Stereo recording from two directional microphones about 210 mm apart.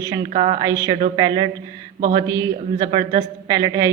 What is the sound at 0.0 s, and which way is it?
A woman's voice, 20° right (ahead or behind).